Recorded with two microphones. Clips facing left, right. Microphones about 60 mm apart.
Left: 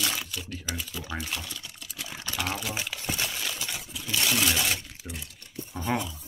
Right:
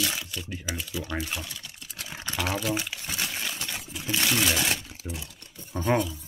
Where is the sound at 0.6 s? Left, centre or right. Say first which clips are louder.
Right 3 dB; centre.